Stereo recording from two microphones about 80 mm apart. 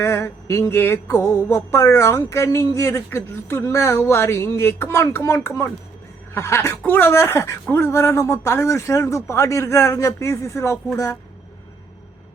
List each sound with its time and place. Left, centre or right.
0.0 s music: left
5.5 s speech: left
6.3 s music: left
10.9 s speech: left